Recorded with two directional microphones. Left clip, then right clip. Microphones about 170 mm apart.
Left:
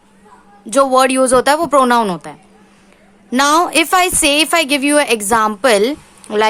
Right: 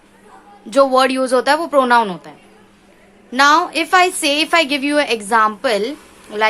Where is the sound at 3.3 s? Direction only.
45° left (ahead or behind).